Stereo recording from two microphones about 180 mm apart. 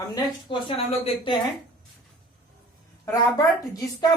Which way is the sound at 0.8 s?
30° left (ahead or behind).